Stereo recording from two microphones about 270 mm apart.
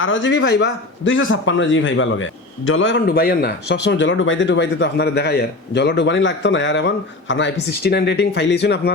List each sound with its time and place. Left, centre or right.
0.0 s a man's voice: left